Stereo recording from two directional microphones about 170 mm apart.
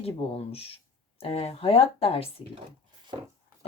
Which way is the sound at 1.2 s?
35° left (ahead or behind).